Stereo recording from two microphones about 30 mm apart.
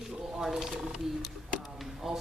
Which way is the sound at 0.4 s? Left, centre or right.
Centre.